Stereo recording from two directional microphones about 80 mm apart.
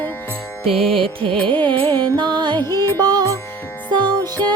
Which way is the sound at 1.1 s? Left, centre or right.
Right.